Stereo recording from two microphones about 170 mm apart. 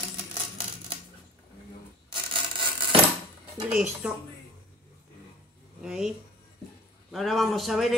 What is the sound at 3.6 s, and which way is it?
Speech, 5° right (ahead or behind).